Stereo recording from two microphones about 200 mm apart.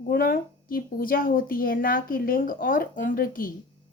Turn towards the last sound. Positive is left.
turn(degrees=45)  # may be behind; listen again after turning